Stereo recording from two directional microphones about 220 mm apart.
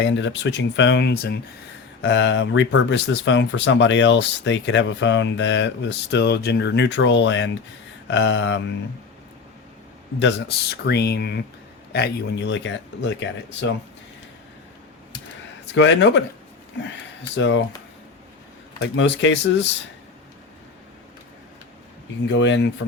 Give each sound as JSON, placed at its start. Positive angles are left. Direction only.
{"t": 0.0, "sound": "speech", "side_deg": 55}
{"t": 10.2, "sound": "speech", "side_deg": 55}
{"t": 15.7, "sound": "speech", "side_deg": 55}
{"t": 17.3, "sound": "speech", "side_deg": 55}
{"t": 18.8, "sound": "speech", "side_deg": 55}
{"t": 22.3, "sound": "speech", "side_deg": 55}